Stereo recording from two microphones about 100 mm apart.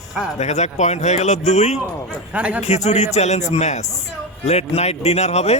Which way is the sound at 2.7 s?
90° left.